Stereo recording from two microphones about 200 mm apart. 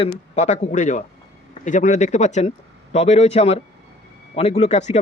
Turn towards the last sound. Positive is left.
turn(degrees=35)  # may be behind; listen again after turning